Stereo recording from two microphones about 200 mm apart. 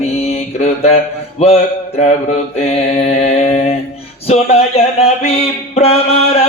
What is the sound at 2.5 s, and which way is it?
Mantra, 30° left (ahead or behind).